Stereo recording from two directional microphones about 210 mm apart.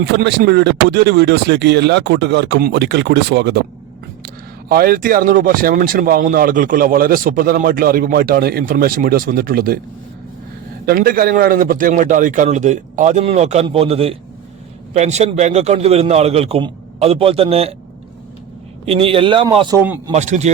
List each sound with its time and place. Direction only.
0.0 s speech: 50° right (ahead or behind)
4.7 s speech: 45° right (ahead or behind)
10.8 s a man's voice: 45° right (ahead or behind); by 17.7 s 30° right (ahead or behind)
18.9 s a man's voice: 25° right (ahead or behind)